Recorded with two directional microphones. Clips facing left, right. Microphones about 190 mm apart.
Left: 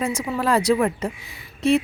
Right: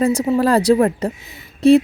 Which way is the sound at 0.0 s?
35° right (ahead or behind).